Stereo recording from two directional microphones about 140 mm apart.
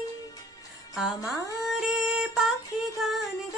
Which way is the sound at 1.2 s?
Centre (ahead or behind).